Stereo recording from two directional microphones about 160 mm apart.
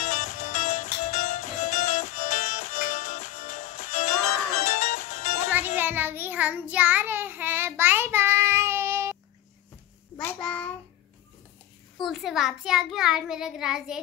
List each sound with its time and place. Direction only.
0.0 s music: 55° left (ahead or behind)
5.8 s child singing: 10° right (ahead or behind)
10.1 s child singing: 5° left (ahead or behind)
12.0 s a child's voice: centre (ahead or behind)